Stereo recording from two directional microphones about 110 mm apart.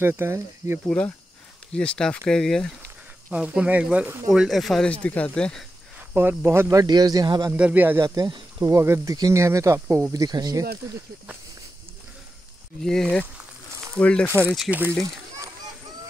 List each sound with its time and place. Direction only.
0.0 s speech: 20° right (ahead or behind)
0.8 s speech: 15° left (ahead or behind)
3.3 s speech: 10° right (ahead or behind)
4.3 s speech: centre (ahead or behind)
5.9 s speech: 20° right (ahead or behind); by 7.5 s 35° right (ahead or behind)
7.5 s speech: 15° right (ahead or behind)
8.0 s speech: 30° right (ahead or behind)
12.8 s speech: 5° left (ahead or behind)
14.7 s speech: 15° right (ahead or behind)